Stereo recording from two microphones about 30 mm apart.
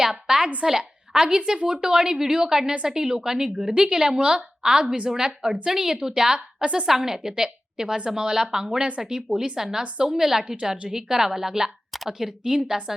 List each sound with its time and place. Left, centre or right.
0.0 s a woman's voice: centre
3.8 s a woman's voice: right
6.3 s a woman's voice: right
6.8 s a woman's voice: centre
12.4 s a woman's voice: right